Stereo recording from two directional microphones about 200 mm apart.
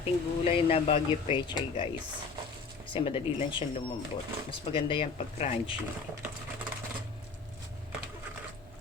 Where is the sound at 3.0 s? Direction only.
25° left (ahead or behind).